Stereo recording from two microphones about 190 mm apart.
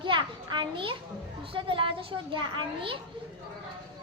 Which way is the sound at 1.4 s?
25° right (ahead or behind).